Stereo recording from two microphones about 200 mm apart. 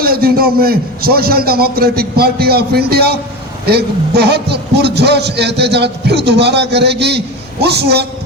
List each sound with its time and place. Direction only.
0.0 s a man's voice: 50° right (ahead or behind)